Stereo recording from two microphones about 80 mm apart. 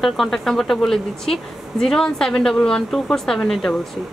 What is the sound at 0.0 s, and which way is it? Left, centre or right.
Speech, centre.